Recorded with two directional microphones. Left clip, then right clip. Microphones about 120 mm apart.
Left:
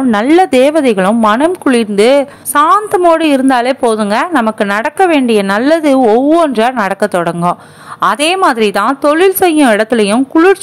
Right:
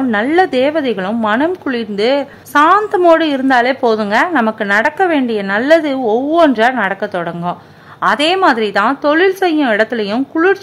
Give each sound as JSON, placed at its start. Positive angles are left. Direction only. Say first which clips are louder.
{"t": 0.1, "sound": "a woman's voice", "louder": "left 5 dB", "side_deg": 45}
{"t": 8.0, "sound": "a woman's voice", "louder": "left 2 dB", "side_deg": 40}